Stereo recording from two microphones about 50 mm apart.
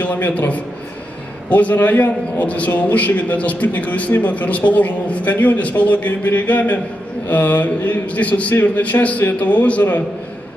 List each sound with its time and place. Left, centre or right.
0.0 s a man's voice: left